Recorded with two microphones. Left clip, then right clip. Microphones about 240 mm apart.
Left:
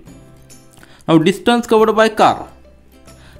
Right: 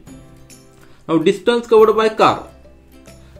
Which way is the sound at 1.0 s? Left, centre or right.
Left.